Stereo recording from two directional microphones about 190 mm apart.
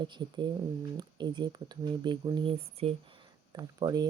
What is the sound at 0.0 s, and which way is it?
Speech, 25° right (ahead or behind).